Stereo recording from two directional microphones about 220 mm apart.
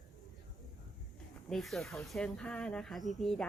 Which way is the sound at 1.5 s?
Centre (ahead or behind).